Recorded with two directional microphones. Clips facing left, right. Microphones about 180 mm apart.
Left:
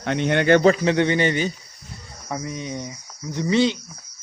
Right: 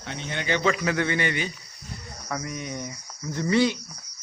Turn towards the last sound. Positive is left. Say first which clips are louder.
# left 2 dB
turn(degrees=20)  # may be behind; listen again after turning